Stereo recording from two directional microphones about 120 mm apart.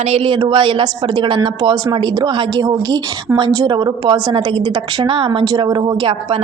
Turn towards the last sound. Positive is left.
turn(degrees=-50)  # may be behind; listen again after turning